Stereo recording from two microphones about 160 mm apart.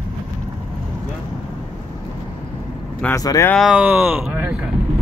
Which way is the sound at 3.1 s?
20° left (ahead or behind).